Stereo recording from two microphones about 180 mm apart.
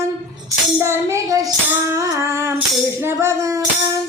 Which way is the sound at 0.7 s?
15° right (ahead or behind).